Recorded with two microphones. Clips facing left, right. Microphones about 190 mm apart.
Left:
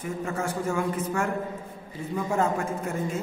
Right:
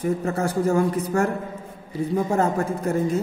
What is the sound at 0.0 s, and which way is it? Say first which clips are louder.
A man's voice: right 7 dB; 40° right (ahead or behind).